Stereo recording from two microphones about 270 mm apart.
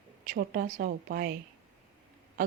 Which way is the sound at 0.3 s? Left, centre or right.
Right.